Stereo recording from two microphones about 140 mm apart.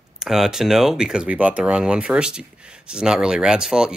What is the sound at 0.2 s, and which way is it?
Speech, 5° right (ahead or behind).